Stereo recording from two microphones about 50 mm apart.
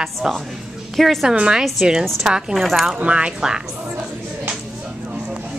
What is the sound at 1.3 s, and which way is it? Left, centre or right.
Speech, centre.